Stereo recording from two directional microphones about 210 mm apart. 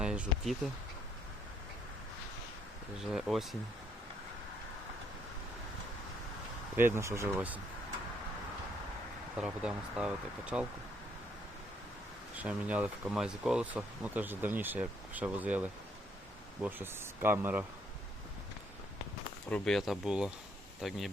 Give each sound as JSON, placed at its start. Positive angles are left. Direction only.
{"t": 0.0, "sound": "speech", "side_deg": -5}
{"t": 3.0, "sound": "speech", "side_deg": 0}
{"t": 6.7, "sound": "speech", "side_deg": -10}
{"t": 9.4, "sound": "speech", "side_deg": -5}
{"t": 12.4, "sound": "speech", "side_deg": -5}
{"t": 19.5, "sound": "speech", "side_deg": 5}